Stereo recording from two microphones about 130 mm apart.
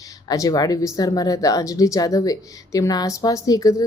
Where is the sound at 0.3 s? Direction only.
30° left (ahead or behind).